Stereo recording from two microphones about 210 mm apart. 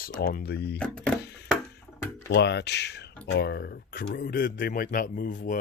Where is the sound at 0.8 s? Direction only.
5° left (ahead or behind).